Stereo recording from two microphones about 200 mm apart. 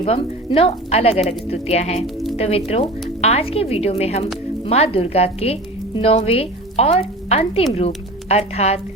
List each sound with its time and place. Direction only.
0.0 s speech: 30° left (ahead or behind)